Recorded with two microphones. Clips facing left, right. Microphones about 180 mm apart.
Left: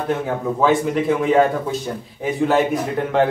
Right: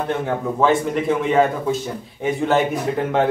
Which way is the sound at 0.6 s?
Centre (ahead or behind).